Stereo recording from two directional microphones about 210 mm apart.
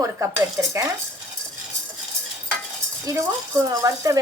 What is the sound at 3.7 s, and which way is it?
Cutlery, 15° right (ahead or behind).